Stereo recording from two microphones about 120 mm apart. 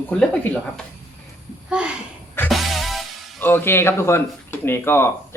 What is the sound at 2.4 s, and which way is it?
Music, centre (ahead or behind).